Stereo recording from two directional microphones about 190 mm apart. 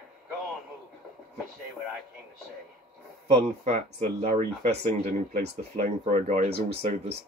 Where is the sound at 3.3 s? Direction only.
35° right (ahead or behind).